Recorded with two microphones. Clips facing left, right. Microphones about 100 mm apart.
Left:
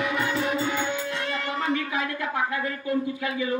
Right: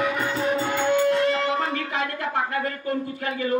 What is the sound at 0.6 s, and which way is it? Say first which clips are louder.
Music: right 7 dB; 55° right (ahead or behind).